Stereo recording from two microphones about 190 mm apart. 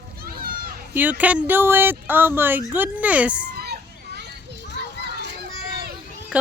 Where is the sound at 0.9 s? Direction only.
10° right (ahead or behind).